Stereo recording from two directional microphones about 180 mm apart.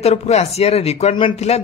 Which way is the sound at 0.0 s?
35° left (ahead or behind).